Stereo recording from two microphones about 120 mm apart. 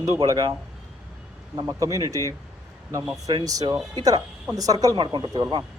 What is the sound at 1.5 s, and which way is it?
Speech, 30° right (ahead or behind).